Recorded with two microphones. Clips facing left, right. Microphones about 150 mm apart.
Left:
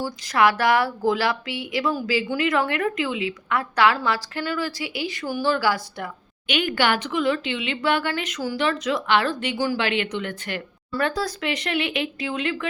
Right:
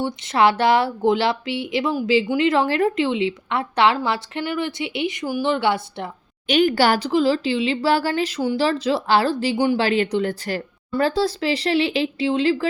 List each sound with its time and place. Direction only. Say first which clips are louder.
0.0 s a woman's voice: right 2 dB; 25° right (ahead or behind)
6.5 s a woman's voice: right 5 dB; 35° right (ahead or behind)